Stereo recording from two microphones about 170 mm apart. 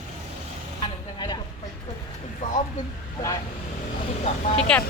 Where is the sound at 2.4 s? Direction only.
45° left (ahead or behind).